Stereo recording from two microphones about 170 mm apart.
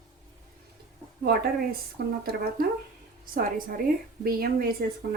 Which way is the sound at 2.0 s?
65° right (ahead or behind).